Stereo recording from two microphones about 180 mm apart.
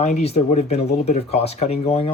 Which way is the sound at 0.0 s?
35° left (ahead or behind).